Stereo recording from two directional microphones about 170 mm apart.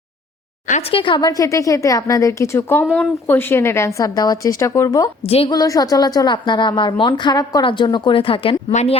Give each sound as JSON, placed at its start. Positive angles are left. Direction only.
{"t": 0.7, "sound": "a woman's voice", "side_deg": 35}
{"t": 2.8, "sound": "speech", "side_deg": 5}
{"t": 5.2, "sound": "a woman's voice", "side_deg": 35}
{"t": 5.5, "sound": "a woman's voice", "side_deg": 20}